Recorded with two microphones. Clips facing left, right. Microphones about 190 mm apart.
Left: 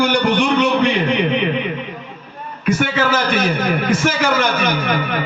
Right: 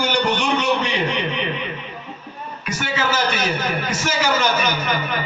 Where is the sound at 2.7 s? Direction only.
55° left (ahead or behind).